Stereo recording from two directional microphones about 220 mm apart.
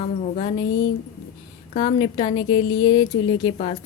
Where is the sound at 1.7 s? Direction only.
25° left (ahead or behind).